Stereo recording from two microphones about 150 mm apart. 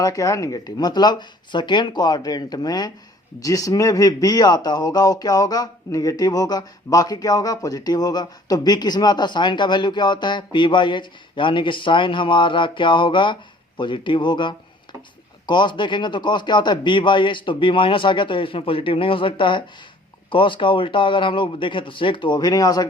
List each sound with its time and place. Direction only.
0.0 s speech: 20° left (ahead or behind)